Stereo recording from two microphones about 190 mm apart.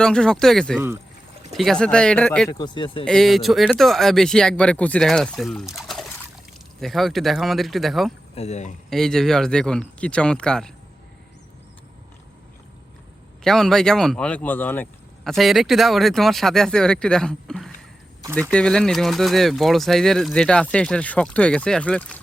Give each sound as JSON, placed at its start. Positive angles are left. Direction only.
{"t": 0.0, "sound": "speech", "side_deg": 5}
{"t": 2.5, "sound": "speech", "side_deg": 25}
{"t": 3.0, "sound": "speech", "side_deg": 5}
{"t": 5.7, "sound": "trickle", "side_deg": 0}
{"t": 6.7, "sound": "speech", "side_deg": 0}
{"t": 8.4, "sound": "speech", "side_deg": 35}
{"t": 8.9, "sound": "speech", "side_deg": 0}
{"t": 13.4, "sound": "speech", "side_deg": 0}